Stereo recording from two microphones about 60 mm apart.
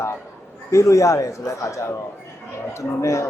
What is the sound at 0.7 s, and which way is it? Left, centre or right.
A man's voice, left.